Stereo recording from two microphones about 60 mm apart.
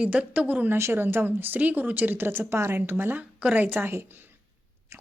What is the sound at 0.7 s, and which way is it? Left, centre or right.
A woman's voice, right.